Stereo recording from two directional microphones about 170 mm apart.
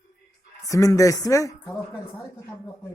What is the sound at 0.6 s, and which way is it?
Speech, 20° left (ahead or behind).